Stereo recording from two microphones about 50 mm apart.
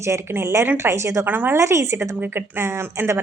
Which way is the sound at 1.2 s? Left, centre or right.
Right.